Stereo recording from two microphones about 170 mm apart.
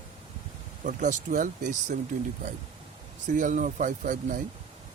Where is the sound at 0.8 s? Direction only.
45° right (ahead or behind).